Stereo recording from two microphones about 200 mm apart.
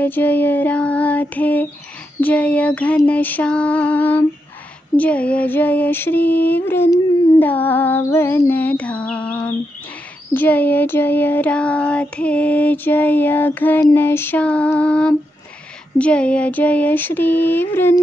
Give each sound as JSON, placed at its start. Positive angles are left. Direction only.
{"t": 0.0, "sound": "child singing", "side_deg": 10}